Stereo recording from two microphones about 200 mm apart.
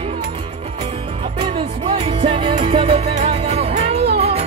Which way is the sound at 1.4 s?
25° right (ahead or behind).